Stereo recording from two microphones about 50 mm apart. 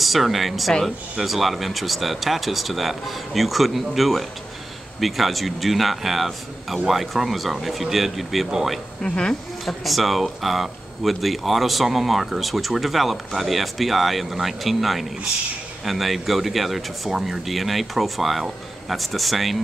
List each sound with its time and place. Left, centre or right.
0.0 s speech: centre
9.0 s speech: left
9.3 s speech: centre